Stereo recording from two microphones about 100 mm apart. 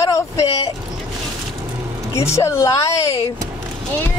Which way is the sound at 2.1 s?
30° left (ahead or behind).